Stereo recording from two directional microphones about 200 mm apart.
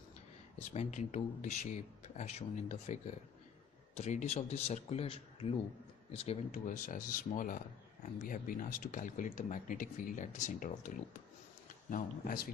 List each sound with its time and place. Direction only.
0.7 s speech: 35° left (ahead or behind)